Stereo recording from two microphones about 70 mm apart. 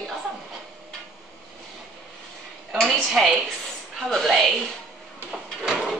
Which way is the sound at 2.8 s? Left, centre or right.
Centre.